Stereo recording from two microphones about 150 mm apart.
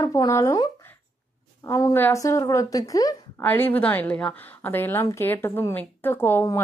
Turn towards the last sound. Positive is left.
turn(degrees=20)  # may be behind; listen again after turning